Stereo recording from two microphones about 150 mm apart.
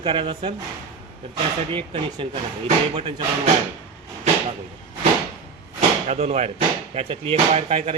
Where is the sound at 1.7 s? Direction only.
35° right (ahead or behind).